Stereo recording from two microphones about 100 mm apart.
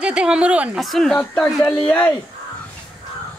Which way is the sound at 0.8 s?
Centre (ahead or behind).